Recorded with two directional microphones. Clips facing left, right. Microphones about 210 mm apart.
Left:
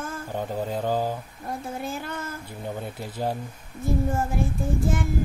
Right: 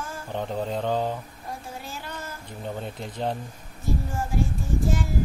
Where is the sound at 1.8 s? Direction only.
55° left (ahead or behind).